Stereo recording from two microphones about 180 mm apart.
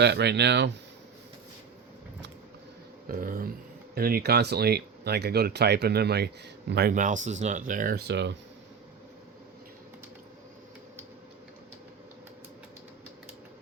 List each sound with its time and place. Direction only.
0.0 s speech: 65° right (ahead or behind)
3.1 s speech: 50° right (ahead or behind)
6.9 s speech: 45° right (ahead or behind); by 8.4 s 75° right (ahead or behind)